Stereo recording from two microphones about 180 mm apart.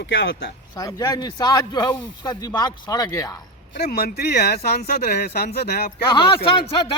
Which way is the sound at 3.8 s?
60° left (ahead or behind).